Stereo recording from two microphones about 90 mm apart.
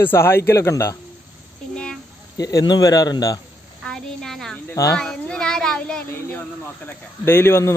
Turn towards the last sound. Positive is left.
turn(degrees=30)  # may be behind; listen again after turning